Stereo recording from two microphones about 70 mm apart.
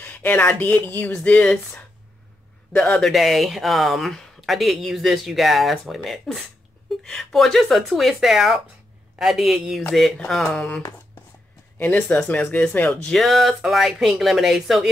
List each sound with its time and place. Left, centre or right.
0.0 s speech: left
3.0 s speech: centre
11.8 s speech: centre
13.0 s speech: centre